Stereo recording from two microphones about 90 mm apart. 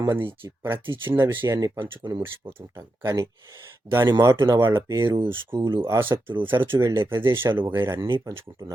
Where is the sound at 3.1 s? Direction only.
40° right (ahead or behind).